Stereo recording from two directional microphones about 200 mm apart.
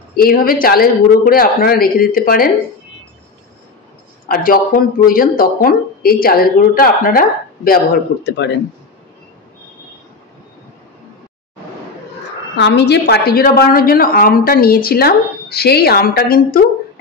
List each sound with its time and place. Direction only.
0.1 s speech: 45° left (ahead or behind)
4.3 s speech: 45° left (ahead or behind)
12.5 s speech: 60° left (ahead or behind)